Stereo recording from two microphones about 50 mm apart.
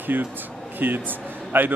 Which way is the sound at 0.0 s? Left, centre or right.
Right.